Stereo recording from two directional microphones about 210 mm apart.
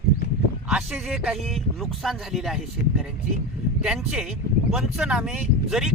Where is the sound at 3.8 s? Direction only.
5° right (ahead or behind).